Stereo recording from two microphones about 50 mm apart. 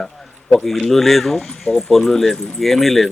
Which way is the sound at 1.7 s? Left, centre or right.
Centre.